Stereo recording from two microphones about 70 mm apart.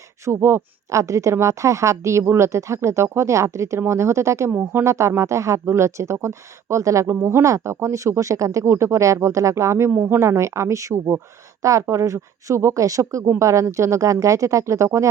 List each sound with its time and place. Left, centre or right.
0.3 s a woman's voice: right